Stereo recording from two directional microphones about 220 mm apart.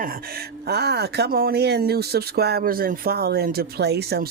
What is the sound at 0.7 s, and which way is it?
Speech, 45° right (ahead or behind).